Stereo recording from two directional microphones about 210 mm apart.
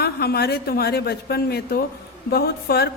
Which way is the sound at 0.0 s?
50° left (ahead or behind).